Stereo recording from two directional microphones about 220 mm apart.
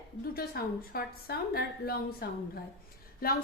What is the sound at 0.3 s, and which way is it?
A woman's voice, 45° left (ahead or behind).